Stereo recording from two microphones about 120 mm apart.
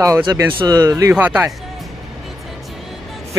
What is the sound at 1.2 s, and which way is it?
Speech, 15° right (ahead or behind).